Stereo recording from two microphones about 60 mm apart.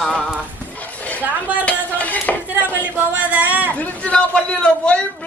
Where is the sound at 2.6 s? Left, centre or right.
Right.